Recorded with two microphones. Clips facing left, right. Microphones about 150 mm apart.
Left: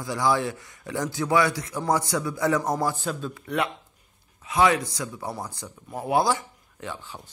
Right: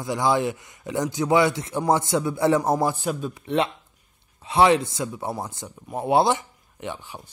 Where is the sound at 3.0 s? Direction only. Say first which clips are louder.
Right 3 dB; 15° right (ahead or behind).